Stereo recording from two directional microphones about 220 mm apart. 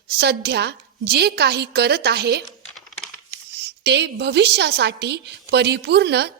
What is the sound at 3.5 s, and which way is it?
A woman's voice, 50° right (ahead or behind).